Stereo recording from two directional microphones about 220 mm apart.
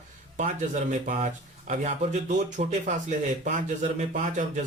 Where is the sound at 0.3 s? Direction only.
35° right (ahead or behind).